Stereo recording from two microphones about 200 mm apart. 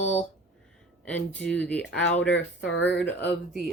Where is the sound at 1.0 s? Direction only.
5° left (ahead or behind).